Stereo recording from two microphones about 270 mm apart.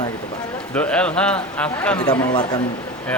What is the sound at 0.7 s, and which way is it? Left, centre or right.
A man's voice, centre.